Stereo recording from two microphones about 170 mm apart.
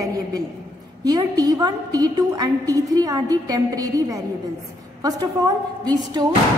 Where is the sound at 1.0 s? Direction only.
20° right (ahead or behind).